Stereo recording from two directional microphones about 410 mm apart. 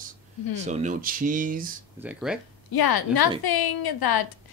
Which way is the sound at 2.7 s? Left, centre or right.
Left.